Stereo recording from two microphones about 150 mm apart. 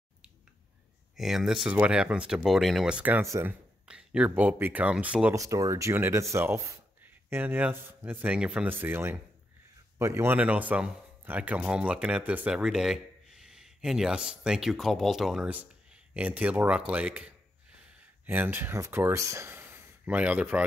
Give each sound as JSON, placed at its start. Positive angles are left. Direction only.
{"t": 1.1, "sound": "speech", "side_deg": 0}
{"t": 3.8, "sound": "speech", "side_deg": -5}
{"t": 5.3, "sound": "a man's voice", "side_deg": -20}